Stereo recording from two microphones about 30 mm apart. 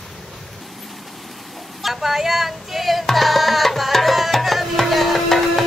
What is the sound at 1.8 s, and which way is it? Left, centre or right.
Speech, centre.